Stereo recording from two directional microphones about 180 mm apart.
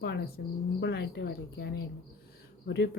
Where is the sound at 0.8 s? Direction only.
75° left (ahead or behind).